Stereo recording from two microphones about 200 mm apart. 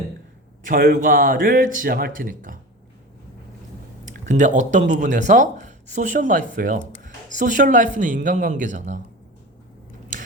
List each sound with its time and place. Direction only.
0.6 s speech: 45° right (ahead or behind)
4.0 s speech: 40° right (ahead or behind)